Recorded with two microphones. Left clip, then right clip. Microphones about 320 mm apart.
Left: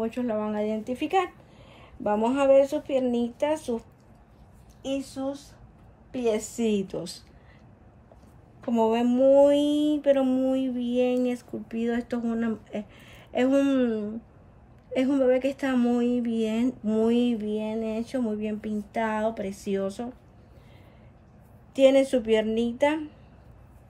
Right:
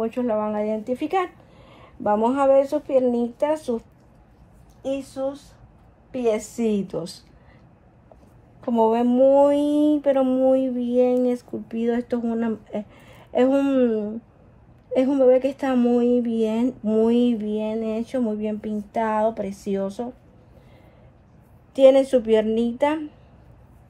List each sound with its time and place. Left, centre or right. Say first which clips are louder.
0.0 s speech: right 5 dB; centre
4.8 s speech: right 5 dB; centre
6.6 s speech: right 3 dB; right
8.8 s speech: right 4 dB; centre
19.4 s speech: right 3 dB; right
21.7 s speech: right 5 dB; centre